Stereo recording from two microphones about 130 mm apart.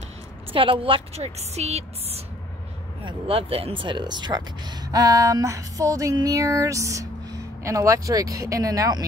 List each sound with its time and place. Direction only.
0.5 s a woman's voice: 45° right (ahead or behind); by 9.0 s 30° right (ahead or behind)